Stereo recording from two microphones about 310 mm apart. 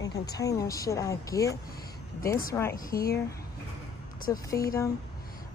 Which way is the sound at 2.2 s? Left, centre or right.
Left.